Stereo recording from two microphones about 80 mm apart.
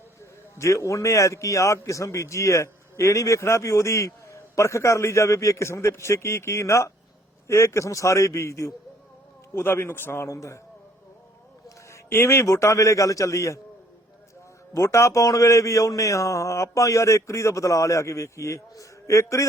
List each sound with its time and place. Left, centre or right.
0.6 s a man's voice: left
11.9 s a man's voice: left
14.7 s a man's voice: left